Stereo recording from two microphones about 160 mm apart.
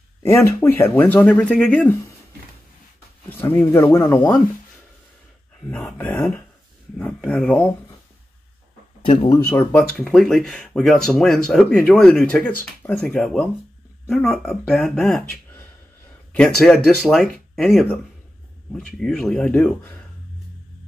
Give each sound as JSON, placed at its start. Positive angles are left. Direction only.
{"t": 0.3, "sound": "speech", "side_deg": 15}
{"t": 3.3, "sound": "speech", "side_deg": 10}
{"t": 5.7, "sound": "speech", "side_deg": 0}
{"t": 9.0, "sound": "speech", "side_deg": 35}
{"t": 9.5, "sound": "speech", "side_deg": 15}
{"t": 9.9, "sound": "speech", "side_deg": 5}
{"t": 16.3, "sound": "speech", "side_deg": 5}